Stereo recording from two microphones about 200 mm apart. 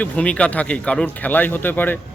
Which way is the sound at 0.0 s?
5° left (ahead or behind).